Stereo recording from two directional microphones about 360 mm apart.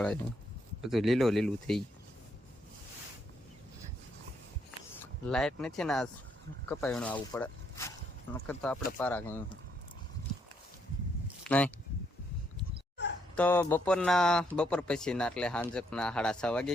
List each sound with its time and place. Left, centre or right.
0.0 s speech: centre
4.9 s speech: centre
11.4 s speech: centre
13.3 s speech: centre